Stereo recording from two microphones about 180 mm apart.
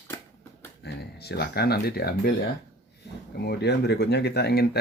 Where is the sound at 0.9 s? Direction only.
65° left (ahead or behind).